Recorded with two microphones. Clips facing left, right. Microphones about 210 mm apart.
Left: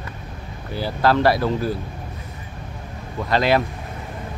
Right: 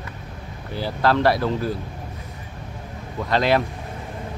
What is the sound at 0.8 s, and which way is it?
Speech, 5° left (ahead or behind).